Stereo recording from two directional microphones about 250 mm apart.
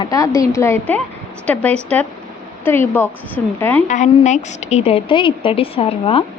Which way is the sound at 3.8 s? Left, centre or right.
Left.